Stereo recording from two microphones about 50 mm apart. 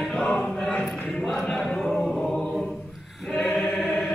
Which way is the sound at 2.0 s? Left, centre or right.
Centre.